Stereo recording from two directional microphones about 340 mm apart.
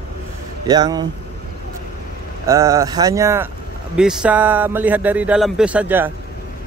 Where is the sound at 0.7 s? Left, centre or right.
Centre.